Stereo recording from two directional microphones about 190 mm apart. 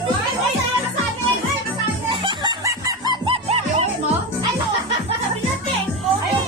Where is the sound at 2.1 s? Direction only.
25° right (ahead or behind).